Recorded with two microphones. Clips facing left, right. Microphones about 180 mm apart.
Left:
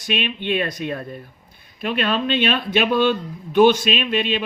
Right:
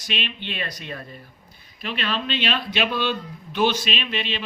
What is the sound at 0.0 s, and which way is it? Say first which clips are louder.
Speech: left 7 dB; 50° left (ahead or behind).